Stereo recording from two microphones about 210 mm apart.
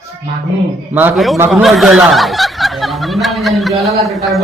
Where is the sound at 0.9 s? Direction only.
5° right (ahead or behind).